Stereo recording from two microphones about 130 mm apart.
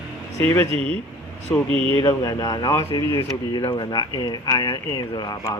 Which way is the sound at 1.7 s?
45° right (ahead or behind).